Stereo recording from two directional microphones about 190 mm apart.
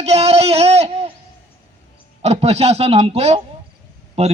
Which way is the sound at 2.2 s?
35° right (ahead or behind).